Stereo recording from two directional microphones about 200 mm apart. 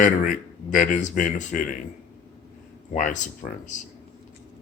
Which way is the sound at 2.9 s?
40° left (ahead or behind).